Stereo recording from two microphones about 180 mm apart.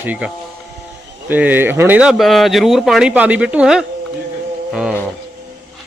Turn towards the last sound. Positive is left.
turn(degrees=0)  # may be behind; listen again after turning